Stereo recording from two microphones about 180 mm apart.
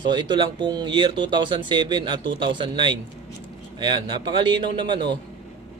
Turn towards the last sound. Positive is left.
turn(degrees=-25)  # may be behind; listen again after turning